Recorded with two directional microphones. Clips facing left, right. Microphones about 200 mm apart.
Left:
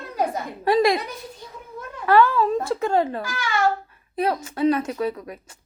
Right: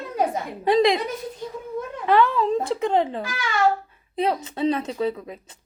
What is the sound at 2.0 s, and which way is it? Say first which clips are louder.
A woman's voice: left 2 dB; 20° right (ahead or behind).